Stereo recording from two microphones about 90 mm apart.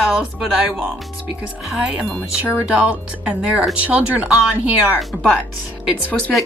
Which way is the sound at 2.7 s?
10° right (ahead or behind).